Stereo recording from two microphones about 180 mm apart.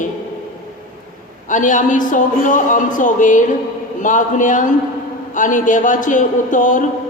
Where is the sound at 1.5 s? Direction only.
45° left (ahead or behind).